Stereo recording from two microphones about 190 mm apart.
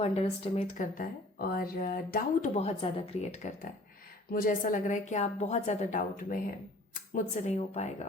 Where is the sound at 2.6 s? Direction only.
30° left (ahead or behind).